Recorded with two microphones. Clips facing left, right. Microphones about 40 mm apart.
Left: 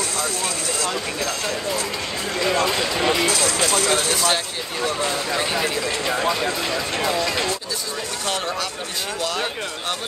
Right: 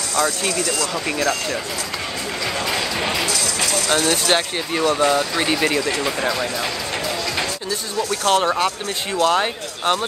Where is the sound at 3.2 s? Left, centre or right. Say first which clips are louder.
Left 2 dB; left.